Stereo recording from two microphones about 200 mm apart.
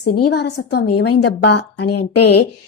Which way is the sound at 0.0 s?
55° left (ahead or behind).